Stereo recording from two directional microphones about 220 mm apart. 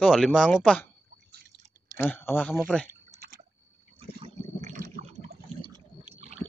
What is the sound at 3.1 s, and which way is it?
Liquid, 40° right (ahead or behind).